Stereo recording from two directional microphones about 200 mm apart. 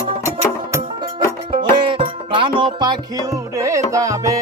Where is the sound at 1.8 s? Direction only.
25° right (ahead or behind).